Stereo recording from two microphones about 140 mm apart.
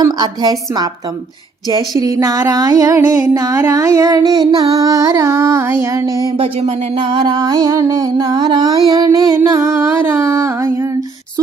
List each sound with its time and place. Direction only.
0.0 s music: 30° right (ahead or behind)
2.0 s music: 25° right (ahead or behind)
6.3 s a sound: 45° right (ahead or behind)
8.9 s music: 30° right (ahead or behind)